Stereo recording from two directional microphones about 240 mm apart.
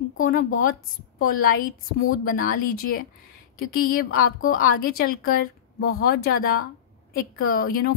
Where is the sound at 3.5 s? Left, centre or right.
Left.